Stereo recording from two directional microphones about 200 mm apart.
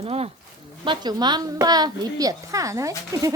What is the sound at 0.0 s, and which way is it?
A woman's voice, 30° right (ahead or behind).